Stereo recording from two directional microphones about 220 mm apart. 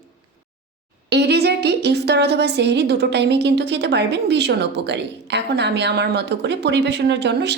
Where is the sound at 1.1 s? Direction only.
50° right (ahead or behind).